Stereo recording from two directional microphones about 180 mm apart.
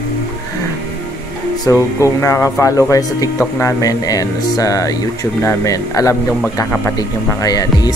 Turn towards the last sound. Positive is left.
turn(degrees=20)  # may be behind; listen again after turning